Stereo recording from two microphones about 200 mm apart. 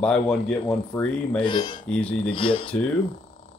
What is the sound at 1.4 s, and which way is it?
Speech, 25° left (ahead or behind).